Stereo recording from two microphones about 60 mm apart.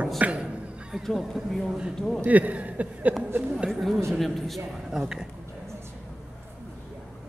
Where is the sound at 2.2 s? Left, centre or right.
Right.